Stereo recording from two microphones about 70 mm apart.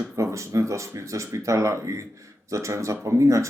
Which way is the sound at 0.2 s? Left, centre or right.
Right.